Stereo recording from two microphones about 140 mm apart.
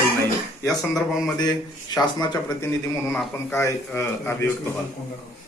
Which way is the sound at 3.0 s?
Centre (ahead or behind).